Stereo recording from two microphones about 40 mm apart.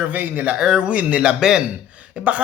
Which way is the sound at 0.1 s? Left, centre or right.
Right.